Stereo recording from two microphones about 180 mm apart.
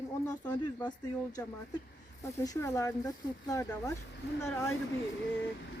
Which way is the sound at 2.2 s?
20° left (ahead or behind).